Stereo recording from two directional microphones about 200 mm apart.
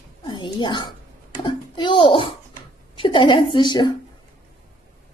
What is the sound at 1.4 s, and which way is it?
A child's voice, 25° left (ahead or behind).